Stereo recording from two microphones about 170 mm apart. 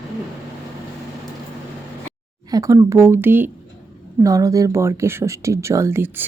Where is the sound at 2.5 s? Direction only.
20° right (ahead or behind).